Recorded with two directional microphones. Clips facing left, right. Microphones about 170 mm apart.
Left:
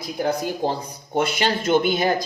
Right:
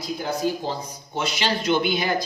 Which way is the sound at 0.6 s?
55° left (ahead or behind).